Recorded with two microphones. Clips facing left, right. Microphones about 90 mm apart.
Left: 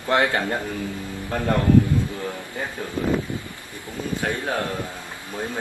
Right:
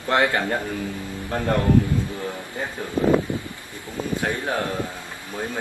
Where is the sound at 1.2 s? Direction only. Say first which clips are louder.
Even; 15° right (ahead or behind).